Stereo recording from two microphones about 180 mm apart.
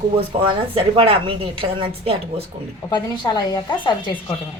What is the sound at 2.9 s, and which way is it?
A woman's voice, 25° left (ahead or behind).